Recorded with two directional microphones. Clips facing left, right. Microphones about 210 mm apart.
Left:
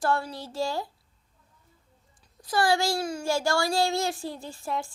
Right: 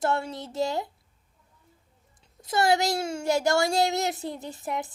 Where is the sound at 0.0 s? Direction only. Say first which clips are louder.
Even; 25° right (ahead or behind).